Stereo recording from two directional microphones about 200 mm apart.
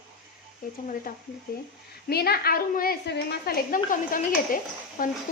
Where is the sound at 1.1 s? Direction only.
45° left (ahead or behind).